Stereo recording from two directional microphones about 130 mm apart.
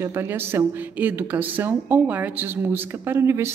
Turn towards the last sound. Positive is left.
turn(degrees=-20)  # may be behind; listen again after turning